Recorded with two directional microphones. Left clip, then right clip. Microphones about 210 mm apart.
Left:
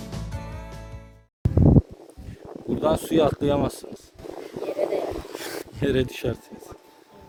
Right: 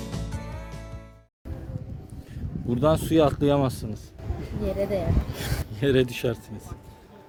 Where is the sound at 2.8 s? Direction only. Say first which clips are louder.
Even; 15° right (ahead or behind).